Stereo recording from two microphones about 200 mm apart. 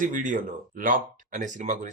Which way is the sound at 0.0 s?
40° right (ahead or behind).